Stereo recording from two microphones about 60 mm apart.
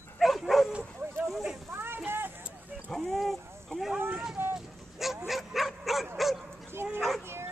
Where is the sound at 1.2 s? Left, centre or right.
Centre.